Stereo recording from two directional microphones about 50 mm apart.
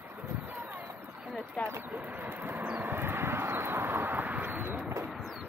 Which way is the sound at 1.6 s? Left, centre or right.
Left.